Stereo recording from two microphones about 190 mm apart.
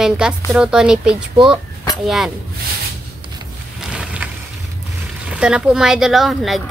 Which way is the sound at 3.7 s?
5° right (ahead or behind).